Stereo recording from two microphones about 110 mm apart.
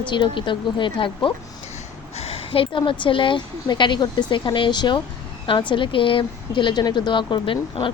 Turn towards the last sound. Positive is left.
turn(degrees=50)  # may be behind; listen again after turning